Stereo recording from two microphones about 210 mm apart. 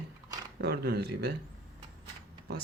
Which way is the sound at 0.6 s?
50° right (ahead or behind).